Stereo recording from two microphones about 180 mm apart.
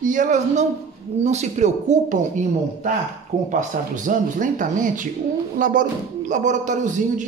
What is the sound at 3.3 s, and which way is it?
A man's voice, 40° right (ahead or behind).